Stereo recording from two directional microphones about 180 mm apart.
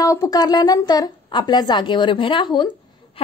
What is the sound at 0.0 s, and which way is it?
A woman's voice, 20° left (ahead or behind).